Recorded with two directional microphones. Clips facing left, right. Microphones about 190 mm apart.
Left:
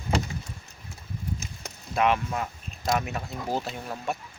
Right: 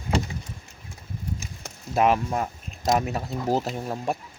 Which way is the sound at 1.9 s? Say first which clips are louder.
Right 3 dB; 40° right (ahead or behind).